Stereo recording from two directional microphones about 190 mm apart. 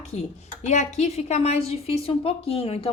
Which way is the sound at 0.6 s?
35° left (ahead or behind).